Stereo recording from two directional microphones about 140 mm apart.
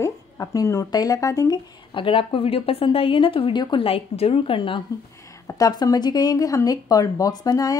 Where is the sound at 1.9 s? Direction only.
40° left (ahead or behind).